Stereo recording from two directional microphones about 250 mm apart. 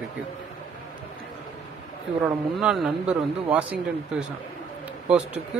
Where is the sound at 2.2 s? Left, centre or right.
Centre.